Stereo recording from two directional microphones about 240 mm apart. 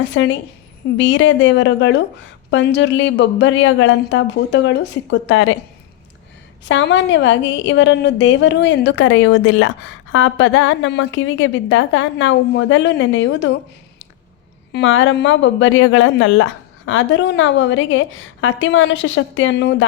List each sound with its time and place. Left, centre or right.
0.1 s a woman's voice: left
6.7 s a woman's voice: left
14.7 s a woman's voice: left